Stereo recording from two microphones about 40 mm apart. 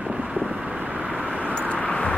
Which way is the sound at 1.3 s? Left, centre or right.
Left.